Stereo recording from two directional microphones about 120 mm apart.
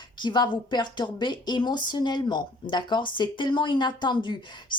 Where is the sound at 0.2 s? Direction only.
40° left (ahead or behind).